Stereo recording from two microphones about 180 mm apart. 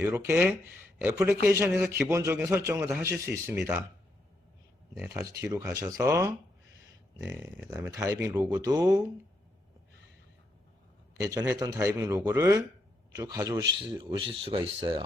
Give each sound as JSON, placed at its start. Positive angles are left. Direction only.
{"t": 0.0, "sound": "speech", "side_deg": -15}
{"t": 5.0, "sound": "speech", "side_deg": -15}
{"t": 7.3, "sound": "speech", "side_deg": -10}
{"t": 11.2, "sound": "speech", "side_deg": -20}